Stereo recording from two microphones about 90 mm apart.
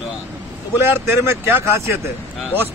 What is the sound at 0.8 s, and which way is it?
Speech, 25° right (ahead or behind).